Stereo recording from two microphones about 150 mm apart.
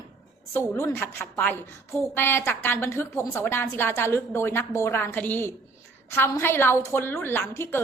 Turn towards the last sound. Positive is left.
turn(degrees=15)  # may be behind; listen again after turning